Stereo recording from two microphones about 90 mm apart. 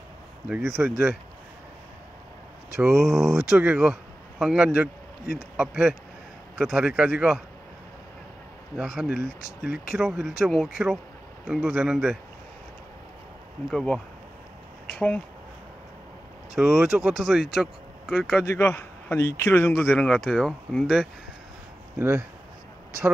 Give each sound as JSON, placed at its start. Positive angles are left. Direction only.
{"t": 0.5, "sound": "speech", "side_deg": -5}
{"t": 2.8, "sound": "speech", "side_deg": -5}
{"t": 8.7, "sound": "speech", "side_deg": -10}
{"t": 15.0, "sound": "speech", "side_deg": 15}
{"t": 16.5, "sound": "speech", "side_deg": -5}
{"t": 18.4, "sound": "a man's voice", "side_deg": 30}
{"t": 20.0, "sound": "speech", "side_deg": 15}
{"t": 20.2, "sound": "speech", "side_deg": -5}
{"t": 21.9, "sound": "speech", "side_deg": -30}